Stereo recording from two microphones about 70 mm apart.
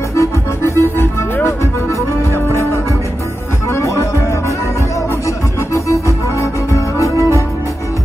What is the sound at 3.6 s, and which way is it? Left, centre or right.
Music, left.